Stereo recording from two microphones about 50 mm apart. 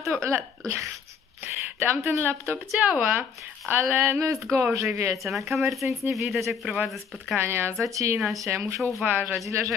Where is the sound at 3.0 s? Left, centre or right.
Right.